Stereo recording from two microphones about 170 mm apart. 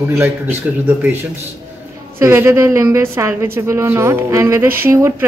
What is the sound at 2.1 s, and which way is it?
Speech, 15° right (ahead or behind).